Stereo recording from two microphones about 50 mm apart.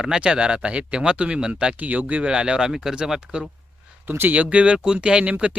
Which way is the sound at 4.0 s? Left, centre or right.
Right.